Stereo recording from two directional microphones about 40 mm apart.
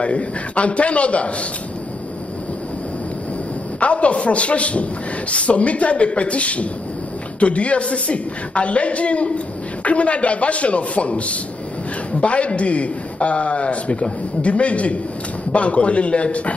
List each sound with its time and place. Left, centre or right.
0.0 s a man's voice: left
3.8 s a man's voice: left